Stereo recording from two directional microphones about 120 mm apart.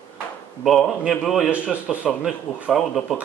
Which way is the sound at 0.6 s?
Centre (ahead or behind).